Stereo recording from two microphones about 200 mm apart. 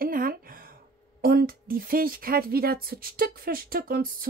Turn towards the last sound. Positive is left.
turn(degrees=-45)  # may be behind; listen again after turning